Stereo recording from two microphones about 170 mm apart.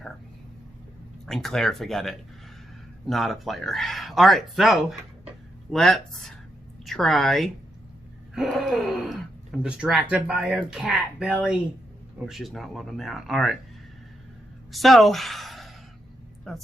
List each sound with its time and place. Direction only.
1.3 s speech: centre (ahead or behind)
8.4 s gasp: 5° right (ahead or behind)
9.6 s speech: 5° right (ahead or behind)
14.7 s a woman's voice: centre (ahead or behind)